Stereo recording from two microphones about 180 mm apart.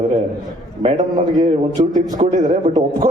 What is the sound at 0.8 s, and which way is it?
A man's voice, 35° right (ahead or behind).